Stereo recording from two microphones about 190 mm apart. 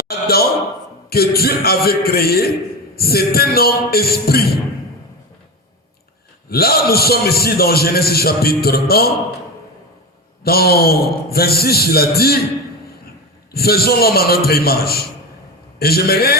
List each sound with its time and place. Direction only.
0.1 s a sound: 55° left (ahead or behind)
1.1 s a man's voice: 55° left (ahead or behind)
6.5 s a man's voice: 55° left (ahead or behind)
10.4 s a man's voice: 55° left (ahead or behind)
13.5 s a man's voice: 55° left (ahead or behind)